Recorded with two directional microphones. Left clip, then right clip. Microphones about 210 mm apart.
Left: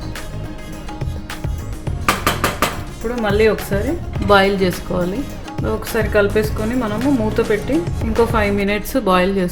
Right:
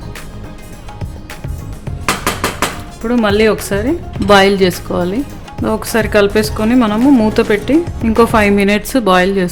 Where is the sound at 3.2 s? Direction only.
45° right (ahead or behind).